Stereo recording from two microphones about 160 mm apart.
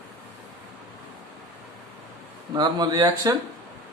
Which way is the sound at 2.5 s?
25° right (ahead or behind).